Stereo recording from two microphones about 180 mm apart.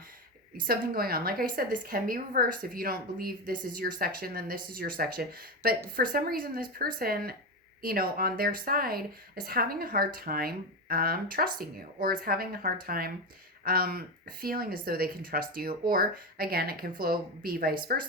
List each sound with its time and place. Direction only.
0.7 s a woman's voice: 55° right (ahead or behind)